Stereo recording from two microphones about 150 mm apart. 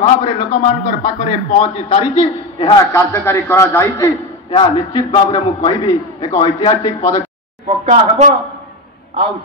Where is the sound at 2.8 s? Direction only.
20° left (ahead or behind).